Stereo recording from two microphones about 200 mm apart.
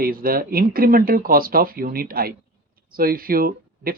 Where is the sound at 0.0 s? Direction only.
45° right (ahead or behind).